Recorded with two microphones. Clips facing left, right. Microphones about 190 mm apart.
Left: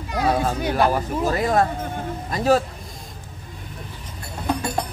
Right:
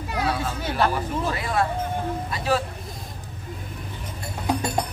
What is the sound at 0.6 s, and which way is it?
Speech, 15° left (ahead or behind).